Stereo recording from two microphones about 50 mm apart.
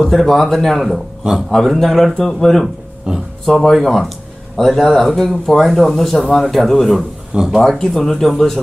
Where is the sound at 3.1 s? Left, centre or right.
Centre.